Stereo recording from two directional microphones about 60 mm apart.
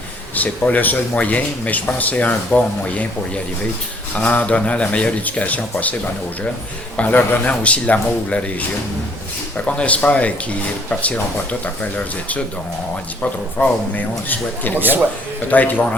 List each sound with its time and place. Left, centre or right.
0.3 s speech: left
7.1 s speech: left
9.6 s speech: left
13.6 s speech: left